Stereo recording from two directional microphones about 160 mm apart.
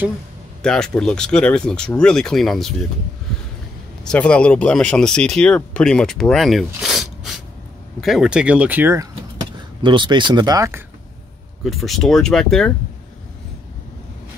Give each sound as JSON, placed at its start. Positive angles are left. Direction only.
{"t": 0.6, "sound": "speech", "side_deg": 5}
{"t": 4.1, "sound": "speech", "side_deg": 5}
{"t": 9.6, "sound": "speech", "side_deg": -30}
{"t": 11.6, "sound": "speech", "side_deg": 0}